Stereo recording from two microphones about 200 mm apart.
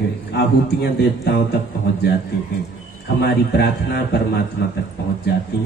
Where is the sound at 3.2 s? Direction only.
55° left (ahead or behind).